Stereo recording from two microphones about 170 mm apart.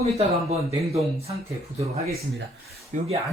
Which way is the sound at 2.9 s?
45° right (ahead or behind).